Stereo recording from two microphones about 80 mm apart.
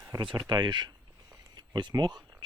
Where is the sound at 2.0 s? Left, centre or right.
Right.